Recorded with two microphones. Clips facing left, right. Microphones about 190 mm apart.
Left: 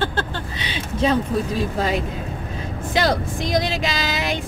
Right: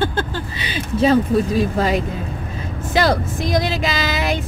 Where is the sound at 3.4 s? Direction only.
5° right (ahead or behind).